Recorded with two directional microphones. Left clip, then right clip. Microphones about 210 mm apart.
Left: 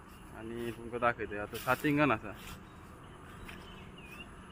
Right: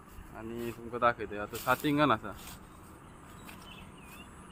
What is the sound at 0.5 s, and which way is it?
Speech, 15° right (ahead or behind).